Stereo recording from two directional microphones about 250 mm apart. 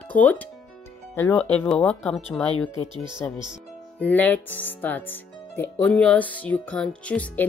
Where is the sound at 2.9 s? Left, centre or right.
Centre.